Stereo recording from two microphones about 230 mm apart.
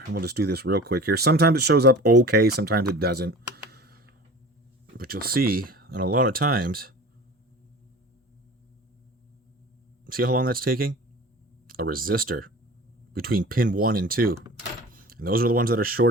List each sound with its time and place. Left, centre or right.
0.1 s speech: right
10.1 s speech: right